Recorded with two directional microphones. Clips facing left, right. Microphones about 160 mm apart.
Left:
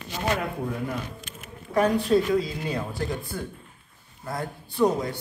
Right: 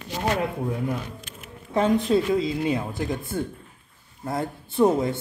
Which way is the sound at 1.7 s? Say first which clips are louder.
Even; 20° right (ahead or behind).